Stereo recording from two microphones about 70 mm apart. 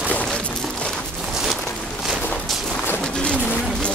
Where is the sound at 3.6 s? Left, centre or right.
Centre.